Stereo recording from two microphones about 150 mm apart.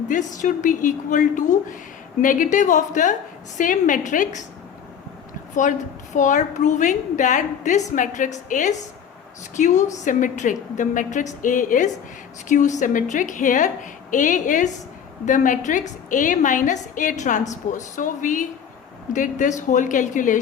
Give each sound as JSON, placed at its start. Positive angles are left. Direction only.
{"t": 0.1, "sound": "a woman's voice", "side_deg": 55}
{"t": 6.1, "sound": "a woman's voice", "side_deg": 55}